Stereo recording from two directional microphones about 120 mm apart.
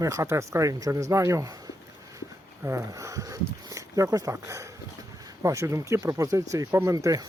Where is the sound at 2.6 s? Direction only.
25° right (ahead or behind).